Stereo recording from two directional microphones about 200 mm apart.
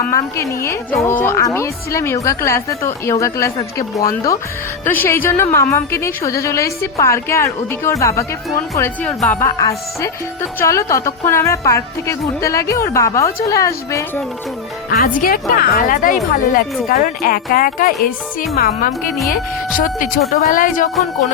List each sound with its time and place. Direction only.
0.1 s a woman's voice: 15° left (ahead or behind)
9.6 s a woman's voice: 20° left (ahead or behind)
14.8 s a woman's voice: 45° left (ahead or behind)
20.3 s a woman's voice: 40° left (ahead or behind)